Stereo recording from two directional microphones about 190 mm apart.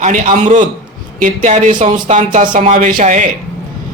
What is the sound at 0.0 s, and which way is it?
Speech, 40° right (ahead or behind).